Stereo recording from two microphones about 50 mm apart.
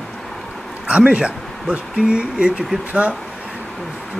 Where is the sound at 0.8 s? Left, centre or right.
Right.